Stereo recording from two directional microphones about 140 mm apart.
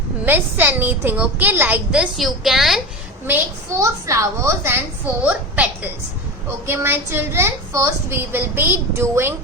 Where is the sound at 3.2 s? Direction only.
20° right (ahead or behind).